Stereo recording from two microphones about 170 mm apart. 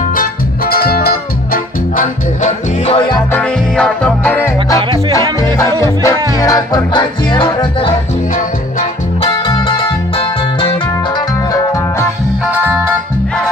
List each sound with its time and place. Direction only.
0.1 s music: 60° left (ahead or behind); by 3.2 s 35° left (ahead or behind)
3.3 s music: 5° left (ahead or behind); by 8.0 s 30° left (ahead or behind)
9.5 s music: 30° left (ahead or behind)
12.4 s music: 10° right (ahead or behind)